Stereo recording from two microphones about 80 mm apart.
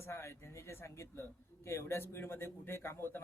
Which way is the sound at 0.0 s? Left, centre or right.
Left.